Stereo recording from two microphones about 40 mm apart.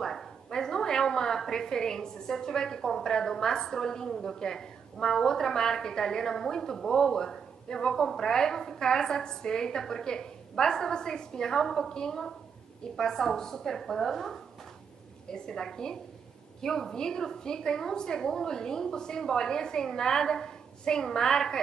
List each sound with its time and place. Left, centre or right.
0.0 s a woman's voice: centre
15.2 s a woman's voice: centre